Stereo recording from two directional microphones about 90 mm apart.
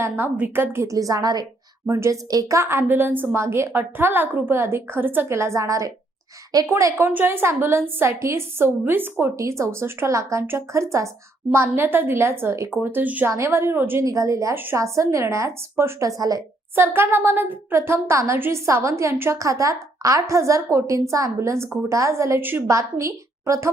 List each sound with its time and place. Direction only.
0.3 s a woman's voice: 20° right (ahead or behind)
0.9 s a woman's voice: 40° right (ahead or behind)
1.9 s a woman's voice: 35° right (ahead or behind)
7.1 s a woman's voice: 20° right (ahead or behind)
13.3 s a woman's voice: 30° right (ahead or behind)
14.0 s speech: 35° right (ahead or behind)
14.5 s a woman's voice: 25° right (ahead or behind)
14.8 s speech: 35° right (ahead or behind)
16.7 s speech: 25° right (ahead or behind)
22.6 s speech: 35° right (ahead or behind)